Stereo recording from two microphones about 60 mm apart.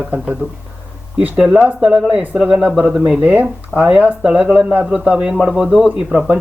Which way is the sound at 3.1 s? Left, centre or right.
Right.